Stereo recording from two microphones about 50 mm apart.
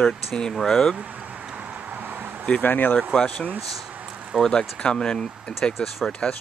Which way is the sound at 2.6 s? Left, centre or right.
Left.